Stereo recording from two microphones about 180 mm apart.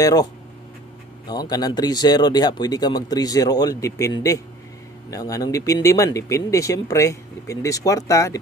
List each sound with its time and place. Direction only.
0.0 s speech: 20° left (ahead or behind)